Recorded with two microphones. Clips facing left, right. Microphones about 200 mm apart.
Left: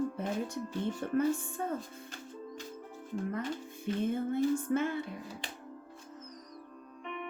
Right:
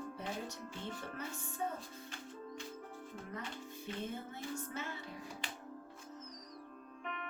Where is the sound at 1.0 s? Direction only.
50° left (ahead or behind).